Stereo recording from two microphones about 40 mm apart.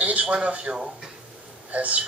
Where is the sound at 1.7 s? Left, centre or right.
Right.